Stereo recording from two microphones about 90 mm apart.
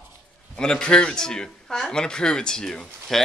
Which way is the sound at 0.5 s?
10° left (ahead or behind).